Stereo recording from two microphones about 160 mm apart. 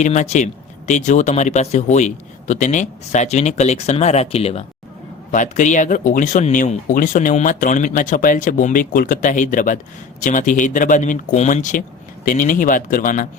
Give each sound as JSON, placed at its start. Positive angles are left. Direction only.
{"t": 0.0, "sound": "speech", "side_deg": 45}
{"t": 5.3, "sound": "speech", "side_deg": 50}